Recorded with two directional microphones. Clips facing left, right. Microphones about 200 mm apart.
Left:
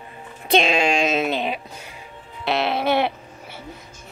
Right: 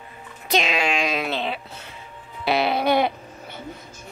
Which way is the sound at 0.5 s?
30° left (ahead or behind).